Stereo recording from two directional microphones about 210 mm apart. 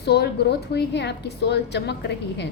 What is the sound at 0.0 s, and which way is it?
A woman's voice, 50° left (ahead or behind).